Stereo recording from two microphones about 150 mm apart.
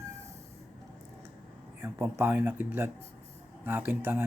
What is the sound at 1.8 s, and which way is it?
Speech, 15° right (ahead or behind).